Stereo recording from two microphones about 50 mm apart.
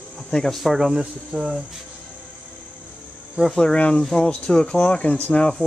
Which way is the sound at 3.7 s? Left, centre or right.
Left.